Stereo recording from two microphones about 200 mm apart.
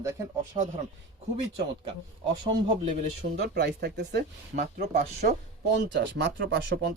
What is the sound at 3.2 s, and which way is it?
Speech, 55° right (ahead or behind).